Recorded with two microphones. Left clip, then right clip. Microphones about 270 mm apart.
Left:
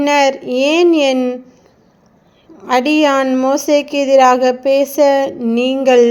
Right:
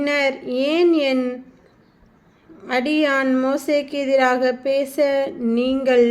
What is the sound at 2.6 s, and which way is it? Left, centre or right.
A woman's voice, left.